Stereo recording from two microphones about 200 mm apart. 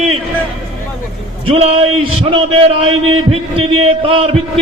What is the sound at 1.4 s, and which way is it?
A man's voice, 30° right (ahead or behind).